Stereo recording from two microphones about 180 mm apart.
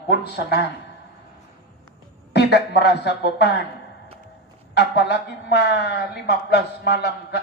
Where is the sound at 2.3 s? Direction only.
70° left (ahead or behind).